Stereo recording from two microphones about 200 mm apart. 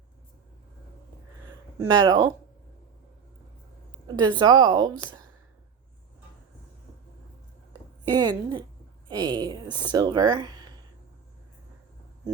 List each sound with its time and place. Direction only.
1.9 s speech: 20° right (ahead or behind)
4.0 s speech: 20° right (ahead or behind)
8.0 s speech: 20° right (ahead or behind)